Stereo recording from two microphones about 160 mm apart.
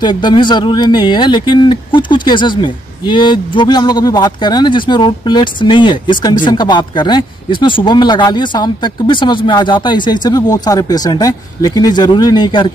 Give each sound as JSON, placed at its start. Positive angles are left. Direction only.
{"t": 0.0, "sound": "speech", "side_deg": 30}